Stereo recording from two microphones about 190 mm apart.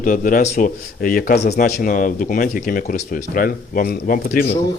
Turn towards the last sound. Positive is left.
turn(degrees=45)  # may be behind; listen again after turning